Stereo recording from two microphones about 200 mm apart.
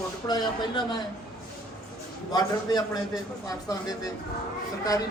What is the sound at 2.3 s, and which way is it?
A man's voice, 20° left (ahead or behind).